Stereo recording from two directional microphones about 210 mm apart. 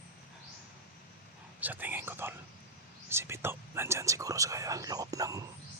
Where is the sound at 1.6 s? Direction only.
10° right (ahead or behind).